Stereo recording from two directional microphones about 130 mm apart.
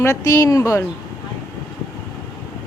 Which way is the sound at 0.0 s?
25° left (ahead or behind).